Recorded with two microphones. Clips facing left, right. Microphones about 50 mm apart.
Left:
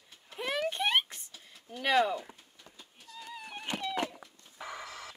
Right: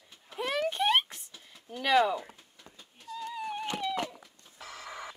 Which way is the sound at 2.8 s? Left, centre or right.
Centre.